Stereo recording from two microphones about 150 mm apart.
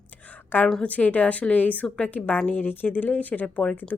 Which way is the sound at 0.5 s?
10° left (ahead or behind).